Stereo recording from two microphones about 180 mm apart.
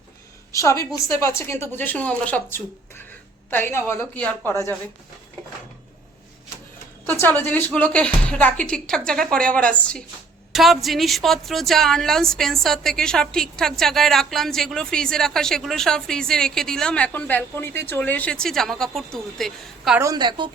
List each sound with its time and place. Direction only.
0.5 s a woman's voice: 15° left (ahead or behind)
7.1 s a woman's voice: 10° left (ahead or behind)
20.0 s a woman's voice: 20° right (ahead or behind)